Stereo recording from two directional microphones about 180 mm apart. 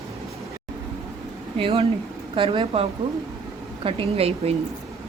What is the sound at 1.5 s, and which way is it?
Speech, 30° right (ahead or behind).